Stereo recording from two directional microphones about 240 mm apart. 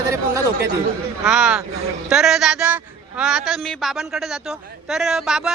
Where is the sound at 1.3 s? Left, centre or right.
Centre.